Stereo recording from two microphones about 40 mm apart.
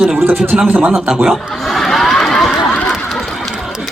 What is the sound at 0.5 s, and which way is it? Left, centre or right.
Speech, right.